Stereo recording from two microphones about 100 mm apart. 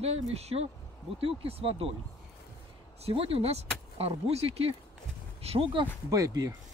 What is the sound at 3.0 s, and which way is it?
Speech, 70° right (ahead or behind).